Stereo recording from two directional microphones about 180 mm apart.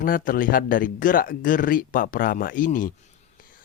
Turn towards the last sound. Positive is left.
turn(degrees=50)  # may be behind; listen again after turning